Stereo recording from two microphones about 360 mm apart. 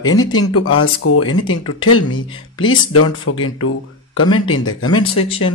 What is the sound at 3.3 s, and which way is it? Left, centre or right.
Speech, left.